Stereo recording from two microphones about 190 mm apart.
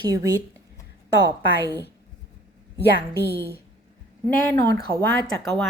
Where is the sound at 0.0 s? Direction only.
20° right (ahead or behind).